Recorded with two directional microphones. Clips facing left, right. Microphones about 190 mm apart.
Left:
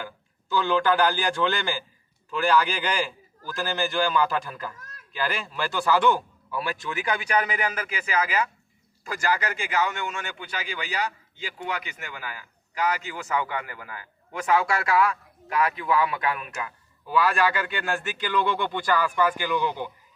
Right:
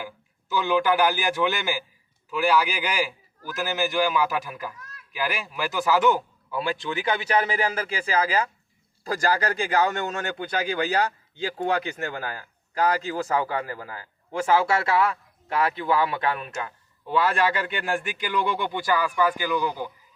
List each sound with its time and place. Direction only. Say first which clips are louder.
0.5 s a man's voice: even; 15° right (ahead or behind)
6.1 s a man's voice: right 2 dB; 20° right (ahead or behind)